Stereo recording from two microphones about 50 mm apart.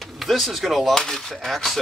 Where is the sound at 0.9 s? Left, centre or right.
Centre.